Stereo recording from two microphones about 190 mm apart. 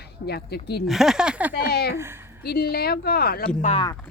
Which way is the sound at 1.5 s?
55° left (ahead or behind).